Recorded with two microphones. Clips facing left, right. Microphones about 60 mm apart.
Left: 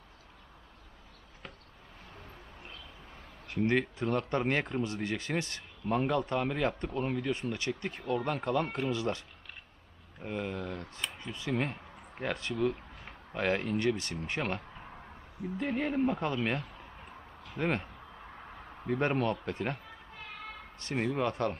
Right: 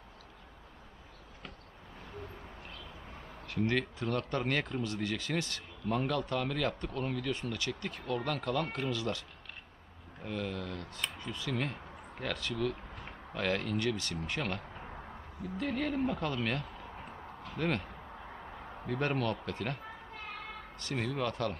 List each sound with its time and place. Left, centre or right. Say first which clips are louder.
3.4 s speech: left 3 dB; left
10.2 s speech: left 2 dB; left
18.9 s speech: left 3 dB; left